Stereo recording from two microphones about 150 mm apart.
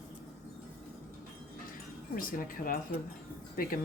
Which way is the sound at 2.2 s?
70° left (ahead or behind).